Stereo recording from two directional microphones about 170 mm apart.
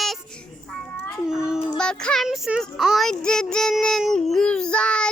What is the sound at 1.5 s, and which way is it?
Music, 35° left (ahead or behind).